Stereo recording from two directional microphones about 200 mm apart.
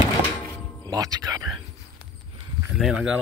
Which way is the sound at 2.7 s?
5° right (ahead or behind).